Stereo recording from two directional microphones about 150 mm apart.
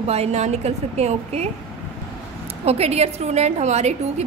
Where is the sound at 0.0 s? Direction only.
45° right (ahead or behind).